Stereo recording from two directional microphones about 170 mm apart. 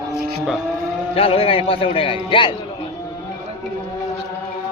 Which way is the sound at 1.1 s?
35° left (ahead or behind).